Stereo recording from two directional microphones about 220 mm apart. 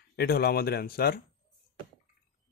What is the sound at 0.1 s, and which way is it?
Speech, 45° left (ahead or behind).